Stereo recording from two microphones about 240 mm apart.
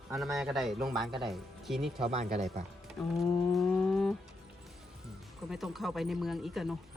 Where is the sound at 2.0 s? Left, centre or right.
Right.